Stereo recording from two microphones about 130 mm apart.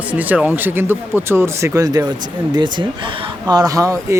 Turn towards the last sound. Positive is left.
turn(degrees=-25)  # may be behind; listen again after turning